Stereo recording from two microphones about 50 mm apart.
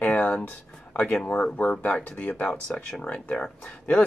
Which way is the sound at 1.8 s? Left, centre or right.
Left.